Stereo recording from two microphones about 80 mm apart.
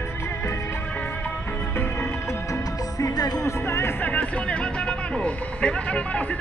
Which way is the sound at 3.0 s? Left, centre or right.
Left.